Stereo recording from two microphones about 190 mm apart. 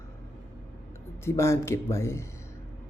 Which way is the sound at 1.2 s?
15° left (ahead or behind).